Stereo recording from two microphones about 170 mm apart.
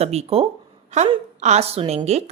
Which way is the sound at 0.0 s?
40° right (ahead or behind).